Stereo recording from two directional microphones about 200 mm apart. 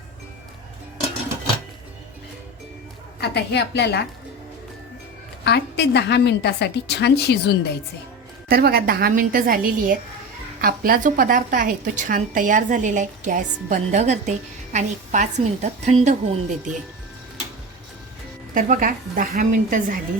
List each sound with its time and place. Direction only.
3.2 s a woman's voice: 55° left (ahead or behind)
5.5 s a woman's voice: 55° left (ahead or behind)
8.4 s a woman's voice: 50° right (ahead or behind)
18.5 s a woman's voice: 45° right (ahead or behind)